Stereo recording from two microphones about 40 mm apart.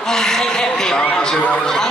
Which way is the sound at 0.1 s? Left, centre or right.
Centre.